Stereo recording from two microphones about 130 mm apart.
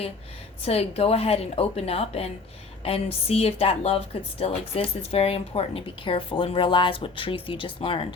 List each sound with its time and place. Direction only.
0.6 s speech: 50° left (ahead or behind)